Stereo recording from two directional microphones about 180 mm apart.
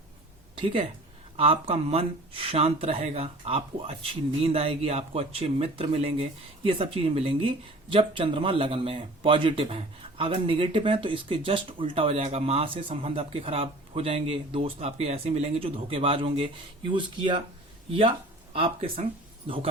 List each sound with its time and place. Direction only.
0.6 s speech: 30° right (ahead or behind)
18.5 s speech: 30° right (ahead or behind)